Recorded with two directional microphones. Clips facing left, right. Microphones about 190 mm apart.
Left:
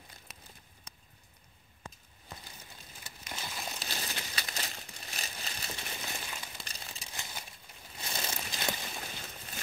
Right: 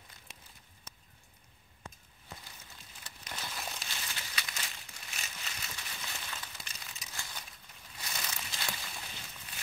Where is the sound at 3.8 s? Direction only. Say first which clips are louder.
Left 5 dB; 35° left (ahead or behind).